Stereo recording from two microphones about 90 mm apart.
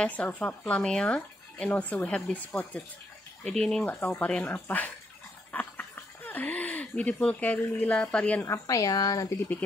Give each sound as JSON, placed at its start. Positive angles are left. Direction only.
{"t": 0.0, "sound": "speech", "side_deg": 15}
{"t": 3.5, "sound": "speech", "side_deg": 5}
{"t": 4.0, "sound": "speech", "side_deg": 20}
{"t": 5.5, "sound": "a sound", "side_deg": 20}
{"t": 5.9, "sound": "speech", "side_deg": 20}
{"t": 8.5, "sound": "speech", "side_deg": 40}